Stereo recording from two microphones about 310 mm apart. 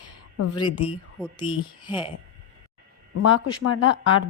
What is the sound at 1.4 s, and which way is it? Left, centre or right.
Speech, centre.